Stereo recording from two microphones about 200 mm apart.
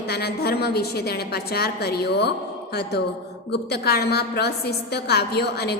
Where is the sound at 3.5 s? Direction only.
55° left (ahead or behind).